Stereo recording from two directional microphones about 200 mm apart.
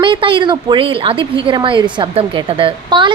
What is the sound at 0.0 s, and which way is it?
A woman's voice, 25° right (ahead or behind).